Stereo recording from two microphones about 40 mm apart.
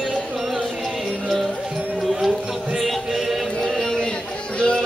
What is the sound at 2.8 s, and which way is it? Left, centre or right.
Music, centre.